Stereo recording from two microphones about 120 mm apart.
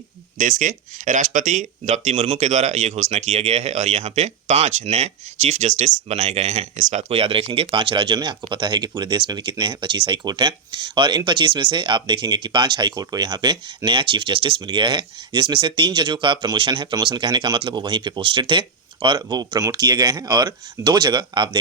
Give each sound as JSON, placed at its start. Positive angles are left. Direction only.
{"t": 0.3, "sound": "speech", "side_deg": -90}